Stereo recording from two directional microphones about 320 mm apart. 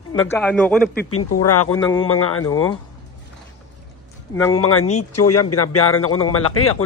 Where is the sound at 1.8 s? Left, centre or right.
Centre.